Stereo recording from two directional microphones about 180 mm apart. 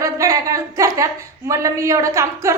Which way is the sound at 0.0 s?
15° right (ahead or behind).